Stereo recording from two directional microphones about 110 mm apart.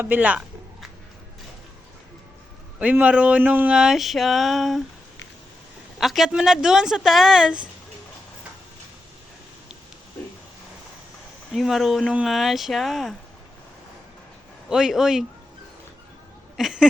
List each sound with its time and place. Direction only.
0.0 s a man's voice: 15° right (ahead or behind)
2.7 s a man's voice: 10° right (ahead or behind)
3.8 s speech: 5° right (ahead or behind)
6.0 s speech: centre (ahead or behind)
11.5 s speech: centre (ahead or behind)
14.7 s speech: 5° right (ahead or behind)
16.6 s speech: 5° right (ahead or behind)